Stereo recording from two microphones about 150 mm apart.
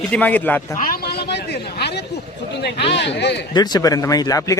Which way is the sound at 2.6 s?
90° left.